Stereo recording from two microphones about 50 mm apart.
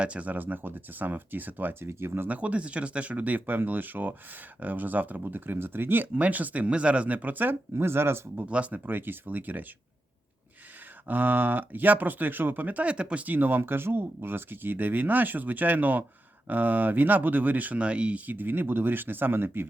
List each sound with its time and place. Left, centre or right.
0.0 s speech: right
1.8 s speech: right
2.2 s speech: right
7.8 s speech: right
8.4 s speech: right
8.7 s speech: right
11.1 s speech: right
18.3 s speech: right